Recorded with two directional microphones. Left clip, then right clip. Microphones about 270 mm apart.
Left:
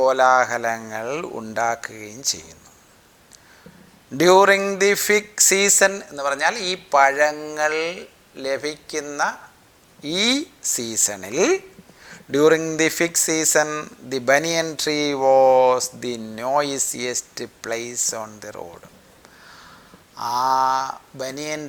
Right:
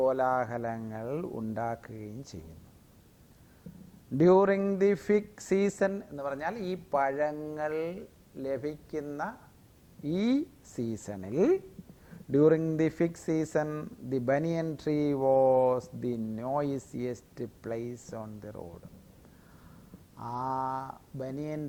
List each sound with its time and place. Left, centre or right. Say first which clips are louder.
0.1 s speech: left 12 dB; centre
4.2 s speech: left 10 dB; centre
12.0 s a sound: left 8 dB; centre
12.7 s speech: left 10 dB; centre
18.1 s speech: left 11 dB; centre
20.6 s speech: left 14 dB; centre